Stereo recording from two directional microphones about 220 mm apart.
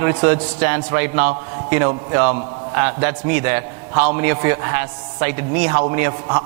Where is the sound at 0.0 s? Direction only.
15° right (ahead or behind).